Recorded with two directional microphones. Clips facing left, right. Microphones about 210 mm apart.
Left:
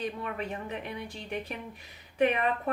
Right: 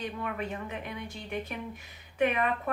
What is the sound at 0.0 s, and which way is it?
Speech, 30° left (ahead or behind).